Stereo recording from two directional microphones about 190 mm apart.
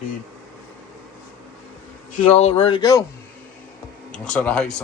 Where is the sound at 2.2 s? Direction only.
35° left (ahead or behind).